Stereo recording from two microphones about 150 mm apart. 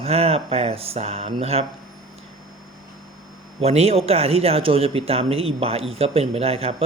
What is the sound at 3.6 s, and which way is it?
Speech, 45° right (ahead or behind).